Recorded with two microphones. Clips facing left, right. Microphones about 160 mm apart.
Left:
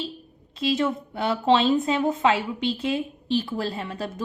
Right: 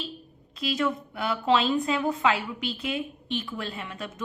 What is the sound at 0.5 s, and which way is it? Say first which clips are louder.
A woman's voice: left 4 dB; 25° left (ahead or behind).